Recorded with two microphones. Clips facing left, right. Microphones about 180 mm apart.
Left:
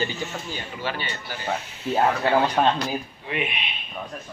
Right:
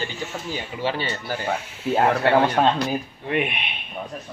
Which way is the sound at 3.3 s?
55° right (ahead or behind).